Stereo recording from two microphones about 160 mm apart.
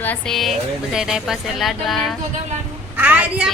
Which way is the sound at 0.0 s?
10° left (ahead or behind).